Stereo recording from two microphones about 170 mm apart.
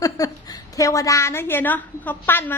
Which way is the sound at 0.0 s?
20° left (ahead or behind).